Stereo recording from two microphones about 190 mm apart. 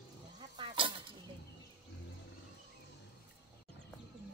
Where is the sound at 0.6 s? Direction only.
25° right (ahead or behind).